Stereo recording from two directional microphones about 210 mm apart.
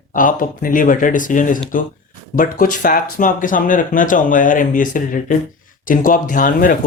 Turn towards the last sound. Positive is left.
turn(degrees=40)  # may be behind; listen again after turning